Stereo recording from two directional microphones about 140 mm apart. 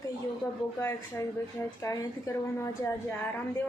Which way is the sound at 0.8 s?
20° left (ahead or behind).